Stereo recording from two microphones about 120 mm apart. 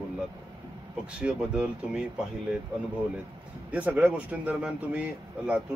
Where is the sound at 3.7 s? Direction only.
10° right (ahead or behind).